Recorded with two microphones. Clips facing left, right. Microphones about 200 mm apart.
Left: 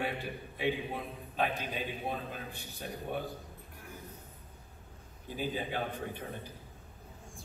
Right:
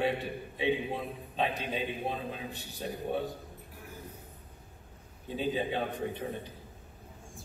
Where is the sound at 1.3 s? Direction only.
25° right (ahead or behind).